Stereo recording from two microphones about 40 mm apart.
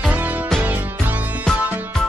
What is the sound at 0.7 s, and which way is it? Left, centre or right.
Music, right.